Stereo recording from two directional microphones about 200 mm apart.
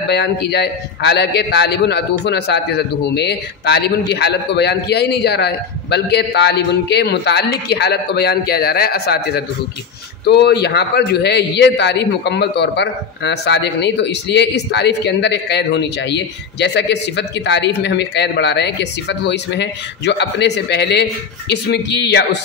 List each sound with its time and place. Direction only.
0.1 s a man's voice: 55° left (ahead or behind)